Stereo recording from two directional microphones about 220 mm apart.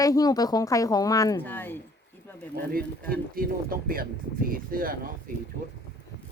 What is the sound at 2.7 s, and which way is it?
Speech, 40° right (ahead or behind).